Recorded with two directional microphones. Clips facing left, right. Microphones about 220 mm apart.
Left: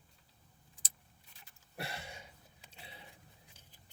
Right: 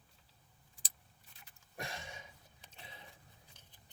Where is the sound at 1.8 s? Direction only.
5° left (ahead or behind).